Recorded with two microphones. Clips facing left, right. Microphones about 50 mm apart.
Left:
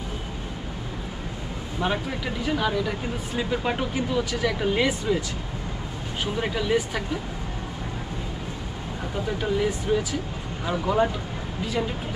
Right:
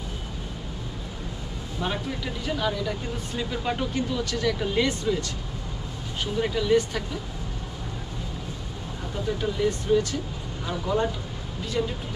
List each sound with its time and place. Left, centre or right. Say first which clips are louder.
1.8 s speech: left 3 dB; centre
6.2 s speech: right 1 dB; centre
9.1 s speech: left 2 dB; centre